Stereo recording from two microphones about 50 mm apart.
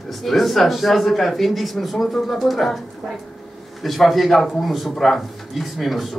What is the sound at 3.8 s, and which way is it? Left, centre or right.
A man's voice, centre.